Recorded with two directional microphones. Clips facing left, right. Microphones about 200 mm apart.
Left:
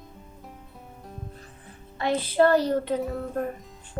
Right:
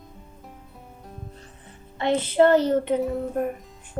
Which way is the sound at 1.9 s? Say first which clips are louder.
Right 3 dB; 20° right (ahead or behind).